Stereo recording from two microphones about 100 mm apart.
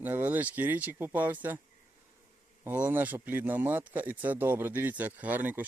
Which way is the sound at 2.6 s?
15° right (ahead or behind).